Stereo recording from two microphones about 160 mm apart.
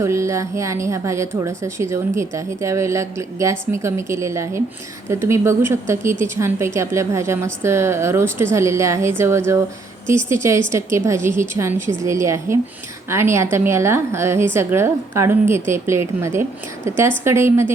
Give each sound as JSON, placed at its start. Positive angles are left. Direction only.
{"t": 0.0, "sound": "a woman's voice", "side_deg": -20}